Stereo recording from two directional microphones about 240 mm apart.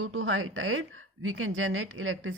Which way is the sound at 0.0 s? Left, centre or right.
Right.